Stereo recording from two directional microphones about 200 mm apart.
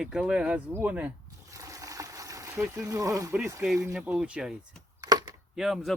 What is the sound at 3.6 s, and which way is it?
Speech, centre (ahead or behind).